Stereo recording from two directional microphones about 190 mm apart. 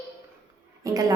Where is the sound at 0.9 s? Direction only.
20° right (ahead or behind).